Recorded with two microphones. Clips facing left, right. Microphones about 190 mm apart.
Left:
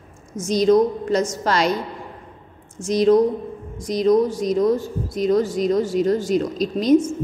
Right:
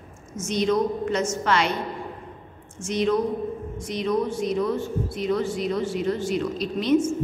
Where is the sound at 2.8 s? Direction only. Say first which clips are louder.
Left 7 dB; 35° left (ahead or behind).